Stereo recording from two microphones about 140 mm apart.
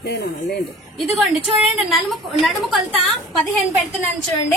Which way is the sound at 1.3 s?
Centre (ahead or behind).